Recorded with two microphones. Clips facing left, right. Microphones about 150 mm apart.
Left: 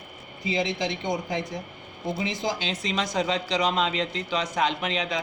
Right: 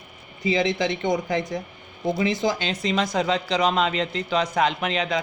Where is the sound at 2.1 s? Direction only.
60° right (ahead or behind).